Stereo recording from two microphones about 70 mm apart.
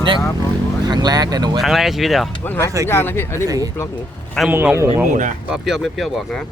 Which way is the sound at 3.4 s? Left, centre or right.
Right.